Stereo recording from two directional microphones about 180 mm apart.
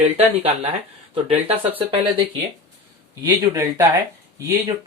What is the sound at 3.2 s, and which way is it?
Speech, 15° right (ahead or behind).